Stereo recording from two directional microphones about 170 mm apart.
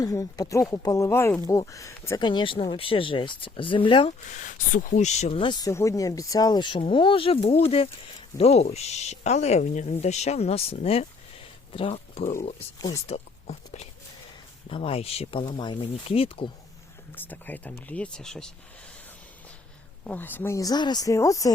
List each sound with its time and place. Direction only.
0.0 s speech: 20° left (ahead or behind)
4.3 s speech: 45° left (ahead or behind)
5.6 s speech: 20° left (ahead or behind); by 12.5 s 45° left (ahead or behind)
14.7 s speech: 30° left (ahead or behind)
17.2 s speech: 10° left (ahead or behind)
20.1 s speech: 10° left (ahead or behind)